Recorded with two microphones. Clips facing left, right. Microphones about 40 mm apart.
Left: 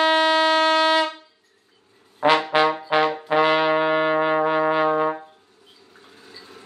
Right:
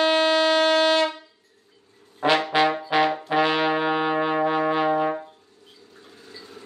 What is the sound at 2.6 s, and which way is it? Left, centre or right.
Brass instrument, centre.